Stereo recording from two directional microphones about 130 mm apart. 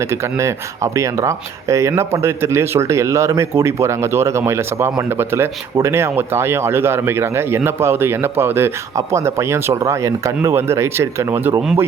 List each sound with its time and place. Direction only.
0.0 s speech: 20° right (ahead or behind)